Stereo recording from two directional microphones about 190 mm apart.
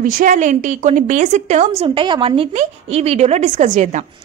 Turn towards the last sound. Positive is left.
turn(degrees=-40)  # may be behind; listen again after turning